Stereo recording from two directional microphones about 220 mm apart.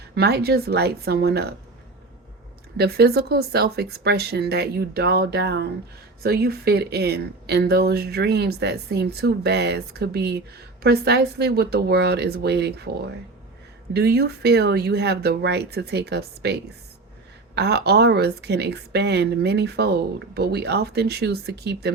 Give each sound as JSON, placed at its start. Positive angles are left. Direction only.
{"t": 0.1, "sound": "a woman's voice", "side_deg": -45}
{"t": 2.7, "sound": "a woman's voice", "side_deg": -45}
{"t": 13.9, "sound": "a woman's voice", "side_deg": -45}